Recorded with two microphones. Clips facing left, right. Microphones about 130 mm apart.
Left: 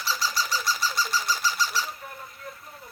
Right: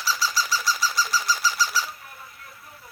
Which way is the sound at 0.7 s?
5° right (ahead or behind).